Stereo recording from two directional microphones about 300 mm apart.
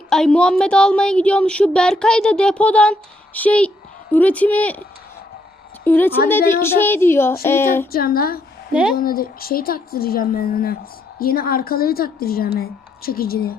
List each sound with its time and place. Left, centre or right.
0.1 s a woman's voice: centre
7.9 s speech: left
8.7 s speech: centre
9.0 s speech: left